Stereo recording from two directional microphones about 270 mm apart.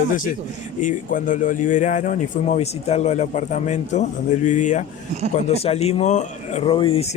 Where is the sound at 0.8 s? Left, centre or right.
Left.